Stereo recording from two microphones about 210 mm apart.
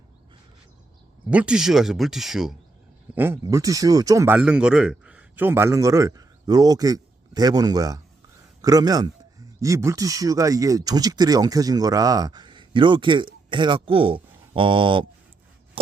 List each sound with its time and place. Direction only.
1.3 s speech: 5° right (ahead or behind); by 15.0 s 25° right (ahead or behind)